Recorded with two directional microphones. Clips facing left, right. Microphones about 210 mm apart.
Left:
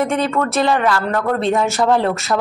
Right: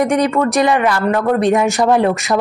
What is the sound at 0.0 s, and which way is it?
Speech, 15° right (ahead or behind).